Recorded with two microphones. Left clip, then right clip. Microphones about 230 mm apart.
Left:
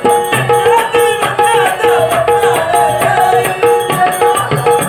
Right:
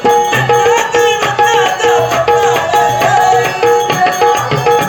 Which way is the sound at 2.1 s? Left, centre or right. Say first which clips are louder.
Even; centre.